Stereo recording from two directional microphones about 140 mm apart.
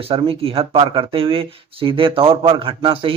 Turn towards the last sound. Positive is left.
turn(degrees=-40)  # may be behind; listen again after turning